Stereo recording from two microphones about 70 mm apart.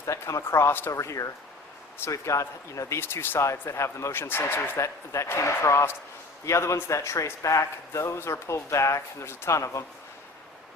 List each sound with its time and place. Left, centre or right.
0.0 s speech: left
3.0 s speech: left
4.8 s speech: left